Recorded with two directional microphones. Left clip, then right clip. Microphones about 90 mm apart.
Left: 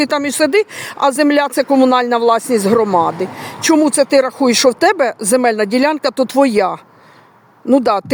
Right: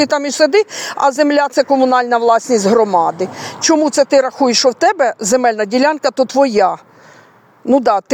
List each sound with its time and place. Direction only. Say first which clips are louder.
0.2 s speech: right 2 dB; 35° left (ahead or behind)
3.0 s speech: right 1 dB; 25° left (ahead or behind)
3.6 s speech: even; 35° left (ahead or behind)
4.8 s speech: even; 20° left (ahead or behind)
6.2 s speech: left 1 dB; 45° left (ahead or behind)
6.5 s speech: right 2 dB; 25° left (ahead or behind)
7.8 s speech: right 2 dB; 20° left (ahead or behind)